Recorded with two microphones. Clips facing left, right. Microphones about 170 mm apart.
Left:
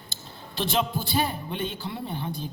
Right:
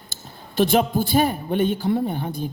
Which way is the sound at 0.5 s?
50° right (ahead or behind).